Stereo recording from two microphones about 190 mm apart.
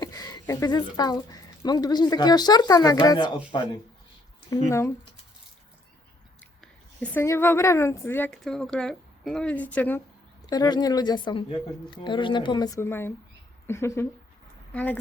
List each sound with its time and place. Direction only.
0.0 s a woman's voice: 20° left (ahead or behind)
6.4 s a woman's voice: 5° left (ahead or behind)
10.4 s a woman's voice: 20° left (ahead or behind)